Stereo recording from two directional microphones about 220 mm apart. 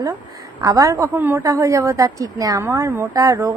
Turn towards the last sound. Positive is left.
turn(degrees=-15)  # may be behind; listen again after turning